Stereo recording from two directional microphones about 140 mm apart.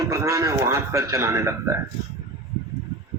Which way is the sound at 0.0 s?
25° right (ahead or behind).